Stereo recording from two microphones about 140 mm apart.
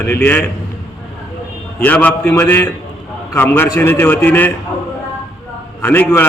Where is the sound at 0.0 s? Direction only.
15° left (ahead or behind).